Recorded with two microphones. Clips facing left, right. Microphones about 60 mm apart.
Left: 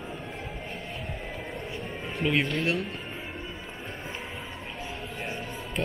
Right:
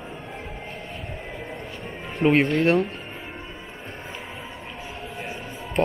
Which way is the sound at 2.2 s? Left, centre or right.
Right.